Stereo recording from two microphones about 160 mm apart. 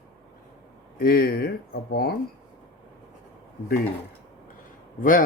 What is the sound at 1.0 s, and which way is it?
Speech, 65° left (ahead or behind).